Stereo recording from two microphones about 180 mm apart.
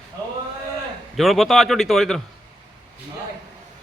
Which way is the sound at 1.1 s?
Centre (ahead or behind).